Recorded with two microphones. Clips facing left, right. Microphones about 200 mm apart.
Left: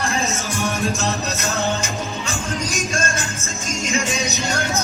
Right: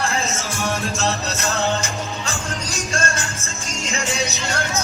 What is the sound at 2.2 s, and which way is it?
Music, 15° left (ahead or behind).